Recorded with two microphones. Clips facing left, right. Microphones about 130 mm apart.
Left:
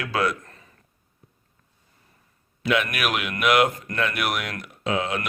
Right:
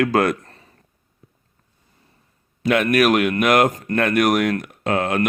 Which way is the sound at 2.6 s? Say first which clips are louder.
Right 8 dB; 45° right (ahead or behind).